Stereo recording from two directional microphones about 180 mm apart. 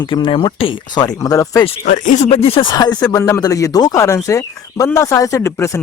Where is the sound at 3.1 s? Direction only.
20° left (ahead or behind).